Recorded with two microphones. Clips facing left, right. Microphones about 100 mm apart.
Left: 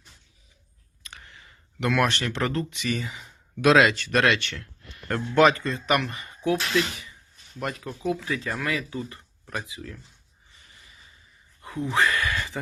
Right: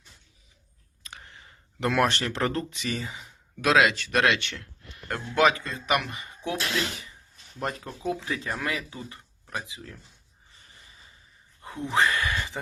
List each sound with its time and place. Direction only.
1.1 s speech: 30° right (ahead or behind)
3.6 s speech: centre (ahead or behind)
4.2 s speech: 20° right (ahead or behind)
5.0 s speech: 5° right (ahead or behind)
7.6 s speech: 30° right (ahead or behind)
11.9 s speech: 25° right (ahead or behind)